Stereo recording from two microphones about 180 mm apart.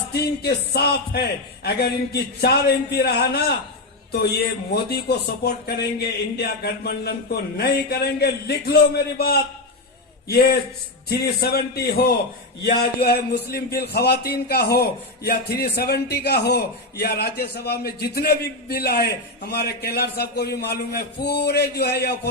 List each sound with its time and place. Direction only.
0.1 s a man's voice: 65° left (ahead or behind)